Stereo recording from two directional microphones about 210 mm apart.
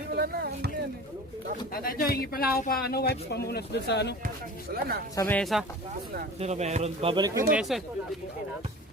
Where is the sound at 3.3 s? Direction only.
50° left (ahead or behind).